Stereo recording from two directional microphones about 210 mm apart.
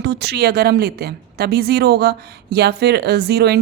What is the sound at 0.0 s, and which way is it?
A woman's voice, 50° right (ahead or behind).